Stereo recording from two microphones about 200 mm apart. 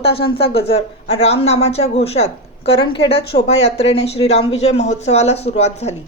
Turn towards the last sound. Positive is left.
turn(degrees=35)  # may be behind; listen again after turning